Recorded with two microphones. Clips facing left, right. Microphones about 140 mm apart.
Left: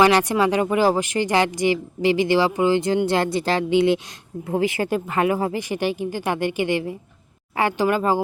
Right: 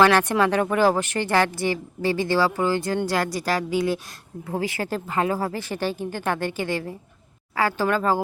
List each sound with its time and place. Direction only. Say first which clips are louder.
0.0 s speech: left 1 dB; 15° left (ahead or behind)